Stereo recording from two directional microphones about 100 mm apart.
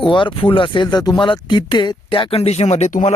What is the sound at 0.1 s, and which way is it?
Speech, 55° left (ahead or behind).